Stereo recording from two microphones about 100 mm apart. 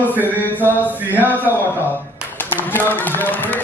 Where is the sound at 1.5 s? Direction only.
20° left (ahead or behind).